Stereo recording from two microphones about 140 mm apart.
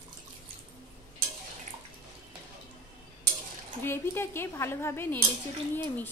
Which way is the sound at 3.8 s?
15° left (ahead or behind).